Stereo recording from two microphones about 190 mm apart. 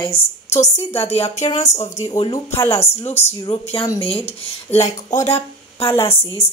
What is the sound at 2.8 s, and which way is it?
Speech, 35° left (ahead or behind).